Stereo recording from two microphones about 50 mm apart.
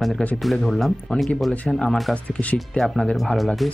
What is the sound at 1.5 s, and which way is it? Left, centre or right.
Speech, left.